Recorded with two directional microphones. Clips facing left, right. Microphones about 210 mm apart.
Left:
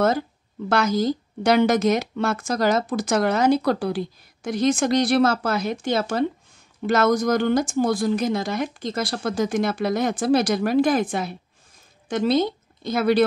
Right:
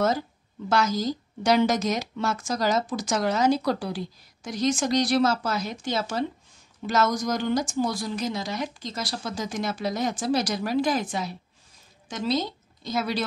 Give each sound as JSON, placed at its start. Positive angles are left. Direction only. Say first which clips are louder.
{"t": 0.7, "sound": "speech", "louder": "left 4 dB", "side_deg": 60}